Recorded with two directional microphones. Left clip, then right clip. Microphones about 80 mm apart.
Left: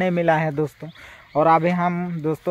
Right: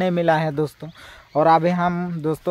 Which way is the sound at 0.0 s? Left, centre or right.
Right.